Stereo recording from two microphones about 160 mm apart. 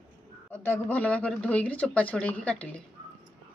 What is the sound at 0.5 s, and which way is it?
Speech, 10° left (ahead or behind).